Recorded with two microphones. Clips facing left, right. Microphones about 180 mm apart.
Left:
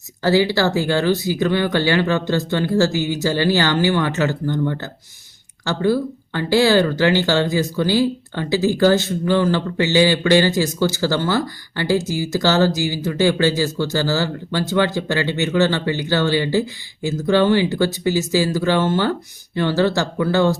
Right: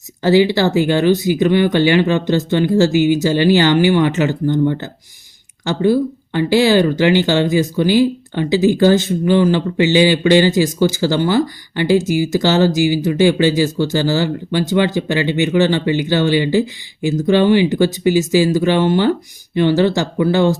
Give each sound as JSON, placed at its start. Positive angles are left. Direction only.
{"t": 0.2, "sound": "speech", "side_deg": -20}